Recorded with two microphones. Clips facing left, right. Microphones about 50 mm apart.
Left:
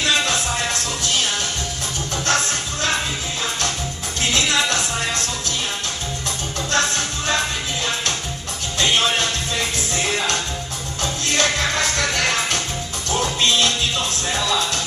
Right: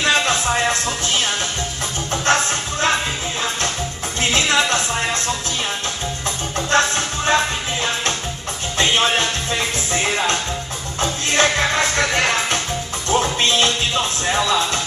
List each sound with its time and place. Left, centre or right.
0.0 s music: right
4.2 s music: right
6.7 s music: right